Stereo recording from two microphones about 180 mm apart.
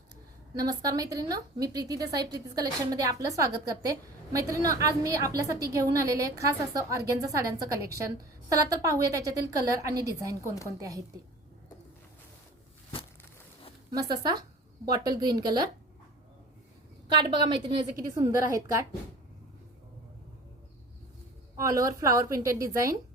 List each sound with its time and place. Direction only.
0.5 s a woman's voice: 20° right (ahead or behind)
13.9 s a woman's voice: 20° right (ahead or behind)
17.2 s a woman's voice: 25° right (ahead or behind)
21.5 s a woman's voice: 20° right (ahead or behind)